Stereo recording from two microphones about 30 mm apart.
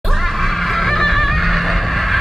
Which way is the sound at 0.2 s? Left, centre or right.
Centre.